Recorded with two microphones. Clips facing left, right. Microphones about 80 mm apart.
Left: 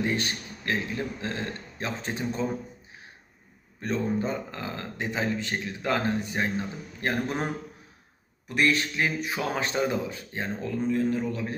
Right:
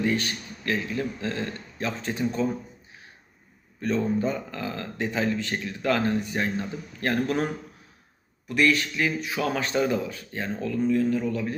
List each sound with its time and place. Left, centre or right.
0.0 s speech: left
3.8 s speech: left